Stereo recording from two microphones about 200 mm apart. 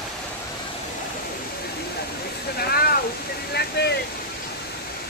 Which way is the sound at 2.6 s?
50° left (ahead or behind).